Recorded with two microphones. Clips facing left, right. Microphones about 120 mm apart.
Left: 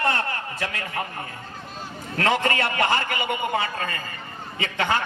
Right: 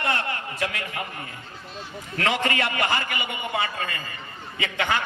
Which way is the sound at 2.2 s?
40° left (ahead or behind).